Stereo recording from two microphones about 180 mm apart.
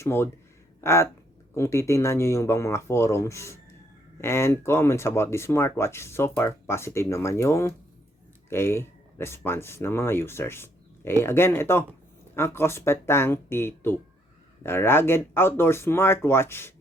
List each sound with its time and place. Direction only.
0.0 s speech: 15° left (ahead or behind)